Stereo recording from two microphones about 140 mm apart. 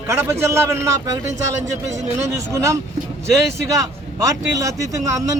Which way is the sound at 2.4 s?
20° right (ahead or behind).